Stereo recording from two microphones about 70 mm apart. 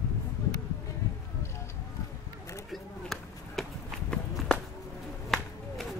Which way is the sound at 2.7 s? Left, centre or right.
Centre.